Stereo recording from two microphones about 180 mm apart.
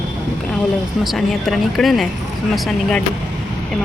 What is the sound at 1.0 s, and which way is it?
Speech, centre (ahead or behind).